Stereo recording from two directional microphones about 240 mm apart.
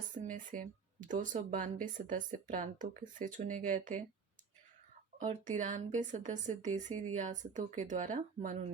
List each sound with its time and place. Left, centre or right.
0.1 s speech: right
5.2 s speech: right